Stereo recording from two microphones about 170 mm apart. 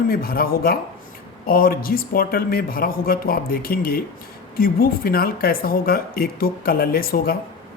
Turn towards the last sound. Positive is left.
turn(degrees=60)  # may be behind; listen again after turning